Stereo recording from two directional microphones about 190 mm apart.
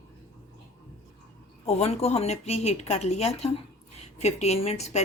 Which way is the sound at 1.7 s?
35° left (ahead or behind).